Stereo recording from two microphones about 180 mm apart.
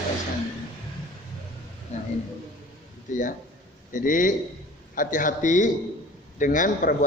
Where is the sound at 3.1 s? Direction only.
45° left (ahead or behind).